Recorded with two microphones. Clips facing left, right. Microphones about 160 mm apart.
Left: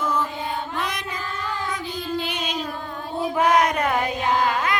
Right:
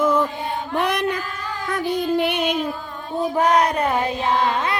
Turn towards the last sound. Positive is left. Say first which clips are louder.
# right 1 dB
turn(degrees=-30)  # may be behind; listen again after turning